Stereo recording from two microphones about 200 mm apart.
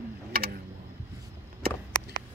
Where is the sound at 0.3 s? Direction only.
50° right (ahead or behind).